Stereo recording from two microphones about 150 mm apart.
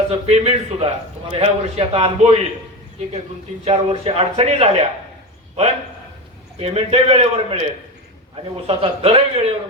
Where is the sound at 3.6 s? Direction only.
40° right (ahead or behind).